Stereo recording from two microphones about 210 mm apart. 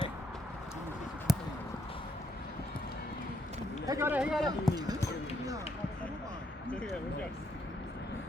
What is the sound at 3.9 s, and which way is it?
Speech, 10° right (ahead or behind).